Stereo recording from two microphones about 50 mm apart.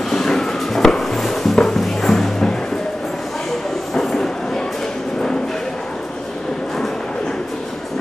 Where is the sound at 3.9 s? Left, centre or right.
Centre.